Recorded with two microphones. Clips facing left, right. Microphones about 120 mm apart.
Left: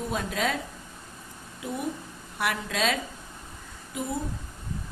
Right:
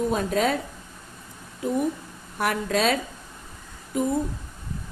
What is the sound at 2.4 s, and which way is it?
Speech, 45° right (ahead or behind).